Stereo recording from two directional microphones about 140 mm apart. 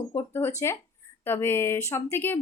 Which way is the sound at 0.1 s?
15° left (ahead or behind).